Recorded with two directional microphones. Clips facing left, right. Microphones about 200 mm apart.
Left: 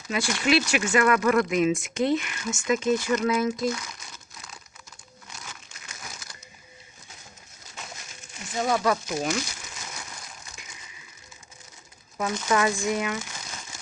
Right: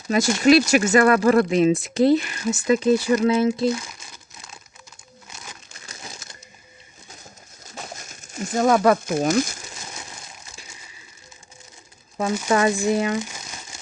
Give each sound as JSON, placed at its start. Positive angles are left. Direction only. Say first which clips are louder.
{"t": 0.1, "sound": "speech", "louder": "right 8 dB", "side_deg": -40}
{"t": 5.4, "sound": "crumpling", "louder": "right 2 dB", "side_deg": -35}
{"t": 7.8, "sound": "crumpling", "louder": "right 5 dB", "side_deg": -45}
{"t": 9.6, "sound": "crumpling", "louder": "right 2 dB", "side_deg": -30}
{"t": 12.5, "sound": "speech", "louder": "right 5 dB", "side_deg": -30}